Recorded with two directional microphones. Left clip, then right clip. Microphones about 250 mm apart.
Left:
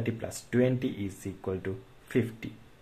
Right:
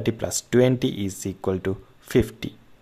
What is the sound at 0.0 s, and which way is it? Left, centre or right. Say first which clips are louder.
Speech: right 9 dB; right.